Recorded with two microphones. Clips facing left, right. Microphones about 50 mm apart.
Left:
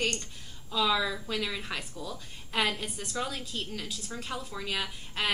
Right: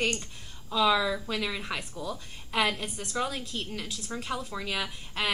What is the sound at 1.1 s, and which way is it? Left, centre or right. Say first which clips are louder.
Speech: right 2 dB; right.